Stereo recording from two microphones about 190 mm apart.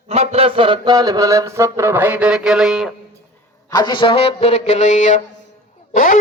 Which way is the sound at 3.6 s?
20° left (ahead or behind).